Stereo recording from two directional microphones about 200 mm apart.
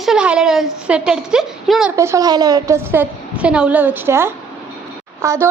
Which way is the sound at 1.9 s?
15° right (ahead or behind).